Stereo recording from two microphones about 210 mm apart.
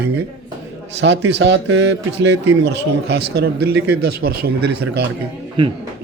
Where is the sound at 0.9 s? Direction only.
60° right (ahead or behind).